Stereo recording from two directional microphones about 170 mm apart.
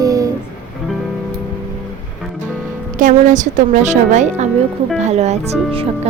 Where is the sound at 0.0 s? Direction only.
20° right (ahead or behind).